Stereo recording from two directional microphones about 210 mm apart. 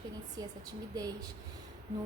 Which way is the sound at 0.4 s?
20° right (ahead or behind).